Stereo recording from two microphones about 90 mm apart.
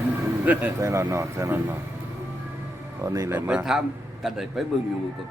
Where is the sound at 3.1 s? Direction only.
35° right (ahead or behind).